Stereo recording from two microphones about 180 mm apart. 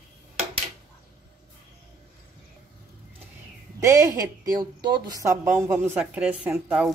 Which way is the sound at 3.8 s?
15° right (ahead or behind).